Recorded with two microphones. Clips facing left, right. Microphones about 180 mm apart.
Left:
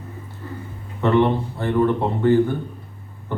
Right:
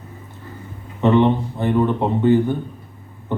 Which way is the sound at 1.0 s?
20° right (ahead or behind).